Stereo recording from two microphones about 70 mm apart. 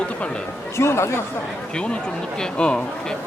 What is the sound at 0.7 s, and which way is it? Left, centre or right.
Speech, left.